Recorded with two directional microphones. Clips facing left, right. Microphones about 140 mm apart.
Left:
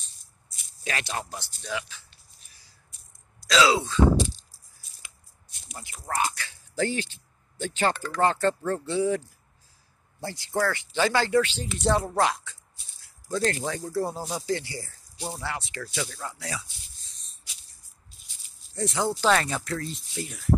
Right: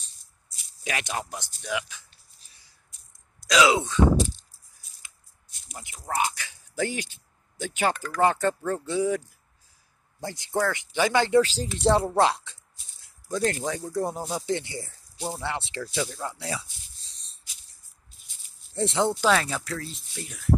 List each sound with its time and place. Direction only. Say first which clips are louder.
0.8 s speech: right 1 dB; 15° right (ahead or behind)
2.4 s a sound: even; 25° right (ahead or behind)
3.3 s speech: right 1 dB; 20° right (ahead or behind)
5.8 s speech: right 1 dB; 15° right (ahead or behind)
7.9 s speech: even; 30° left (ahead or behind)
8.2 s speech: right 1 dB; 15° right (ahead or behind)
10.2 s speech: even; 20° right (ahead or behind)
11.4 s speech: right 3 dB; 35° right (ahead or behind)
13.0 s rattle: even; 15° right (ahead or behind)
13.7 s speech: even; 10° right (ahead or behind); by 16.6 s 25° right (ahead or behind)
18.8 s speech: right 3 dB; 25° right (ahead or behind)
19.2 s speech: even; centre (ahead or behind)